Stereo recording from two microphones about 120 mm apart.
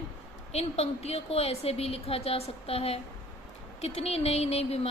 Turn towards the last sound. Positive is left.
turn(degrees=60)  # may be behind; listen again after turning